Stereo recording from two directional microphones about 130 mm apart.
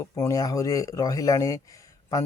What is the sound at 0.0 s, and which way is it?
Speech, 25° left (ahead or behind).